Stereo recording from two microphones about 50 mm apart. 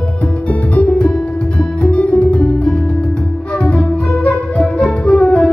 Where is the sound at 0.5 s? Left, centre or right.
Left.